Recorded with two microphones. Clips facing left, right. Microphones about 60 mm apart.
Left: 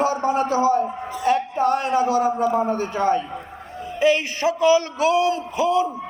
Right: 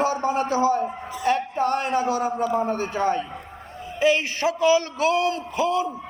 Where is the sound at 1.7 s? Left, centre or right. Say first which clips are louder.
Left 3 dB; right.